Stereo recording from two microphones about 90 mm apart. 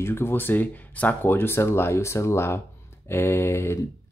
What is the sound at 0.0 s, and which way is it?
Speech, 25° left (ahead or behind).